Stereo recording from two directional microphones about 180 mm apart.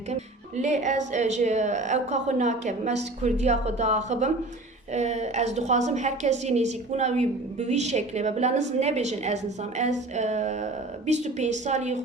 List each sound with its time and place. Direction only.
0.1 s a woman's voice: 40° right (ahead or behind)